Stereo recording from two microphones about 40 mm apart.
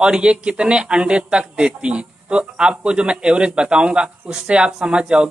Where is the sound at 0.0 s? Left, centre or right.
Right.